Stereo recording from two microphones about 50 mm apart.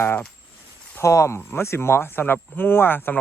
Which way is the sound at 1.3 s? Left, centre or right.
Left.